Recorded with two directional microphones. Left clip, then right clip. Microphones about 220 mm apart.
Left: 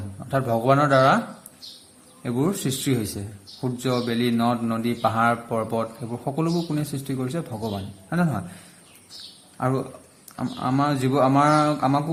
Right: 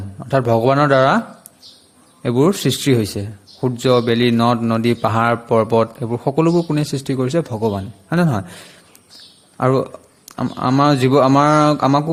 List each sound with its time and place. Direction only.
0.3 s speech: 35° right (ahead or behind)
2.2 s speech: 40° right (ahead or behind)
9.6 s speech: 40° right (ahead or behind)